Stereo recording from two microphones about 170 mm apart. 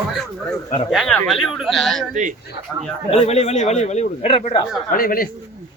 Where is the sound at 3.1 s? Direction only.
40° left (ahead or behind).